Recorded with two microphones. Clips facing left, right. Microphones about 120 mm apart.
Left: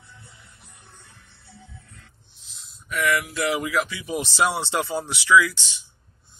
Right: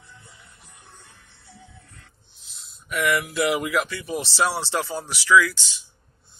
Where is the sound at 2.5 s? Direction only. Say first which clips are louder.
Right 1 dB; 5° right (ahead or behind); by 5.8 s 20° left (ahead or behind).